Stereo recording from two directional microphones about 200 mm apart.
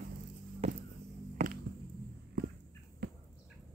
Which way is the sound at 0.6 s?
30° right (ahead or behind).